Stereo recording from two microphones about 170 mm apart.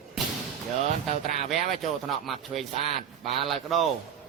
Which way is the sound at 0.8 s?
40° right (ahead or behind).